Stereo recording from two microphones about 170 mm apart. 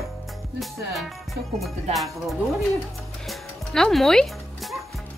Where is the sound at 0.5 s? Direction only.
Centre (ahead or behind).